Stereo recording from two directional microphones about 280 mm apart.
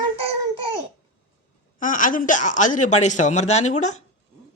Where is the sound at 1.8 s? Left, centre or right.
Left.